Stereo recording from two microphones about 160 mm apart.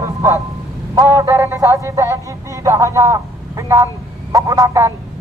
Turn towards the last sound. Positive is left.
turn(degrees=-20)  # may be behind; listen again after turning